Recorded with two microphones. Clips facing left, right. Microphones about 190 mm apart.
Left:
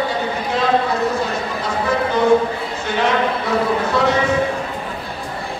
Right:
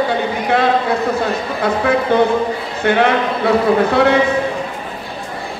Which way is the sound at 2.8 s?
60° right (ahead or behind).